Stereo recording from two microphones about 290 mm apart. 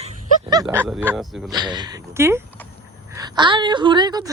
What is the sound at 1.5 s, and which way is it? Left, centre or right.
Speech, centre.